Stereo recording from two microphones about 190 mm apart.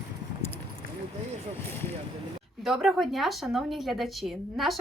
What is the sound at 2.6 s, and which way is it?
Speech, centre (ahead or behind).